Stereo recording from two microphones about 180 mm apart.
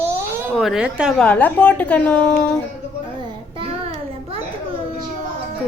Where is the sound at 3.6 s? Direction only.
30° right (ahead or behind).